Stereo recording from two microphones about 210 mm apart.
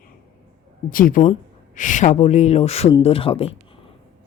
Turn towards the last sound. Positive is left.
turn(degrees=25)  # may be behind; listen again after turning